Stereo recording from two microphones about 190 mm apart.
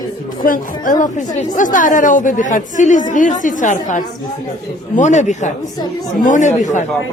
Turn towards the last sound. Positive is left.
turn(degrees=40)  # may be behind; listen again after turning